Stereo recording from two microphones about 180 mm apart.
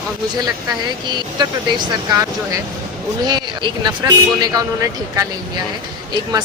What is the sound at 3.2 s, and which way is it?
Speech, 25° right (ahead or behind).